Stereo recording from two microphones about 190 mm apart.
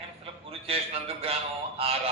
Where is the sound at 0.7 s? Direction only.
30° right (ahead or behind).